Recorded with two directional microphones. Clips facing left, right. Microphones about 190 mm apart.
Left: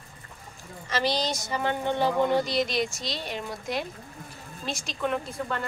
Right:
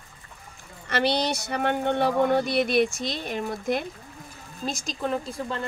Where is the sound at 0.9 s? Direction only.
65° right (ahead or behind).